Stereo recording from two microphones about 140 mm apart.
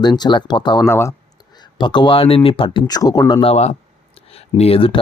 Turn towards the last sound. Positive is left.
turn(degrees=40)  # may be behind; listen again after turning